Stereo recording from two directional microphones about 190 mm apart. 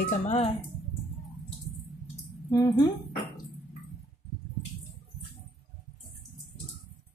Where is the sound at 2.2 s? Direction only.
15° left (ahead or behind).